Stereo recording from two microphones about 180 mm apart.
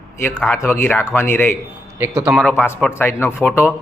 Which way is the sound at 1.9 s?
10° right (ahead or behind).